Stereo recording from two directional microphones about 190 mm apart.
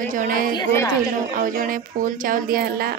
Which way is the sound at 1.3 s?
45° right (ahead or behind).